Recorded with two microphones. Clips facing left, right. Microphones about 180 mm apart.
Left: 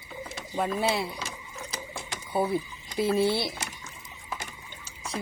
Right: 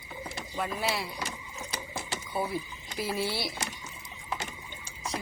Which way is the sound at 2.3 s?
25° left (ahead or behind).